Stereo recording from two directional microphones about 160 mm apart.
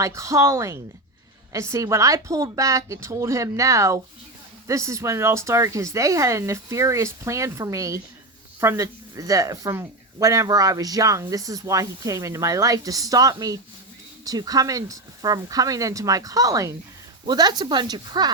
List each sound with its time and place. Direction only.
0.0 s speech: 20° right (ahead or behind)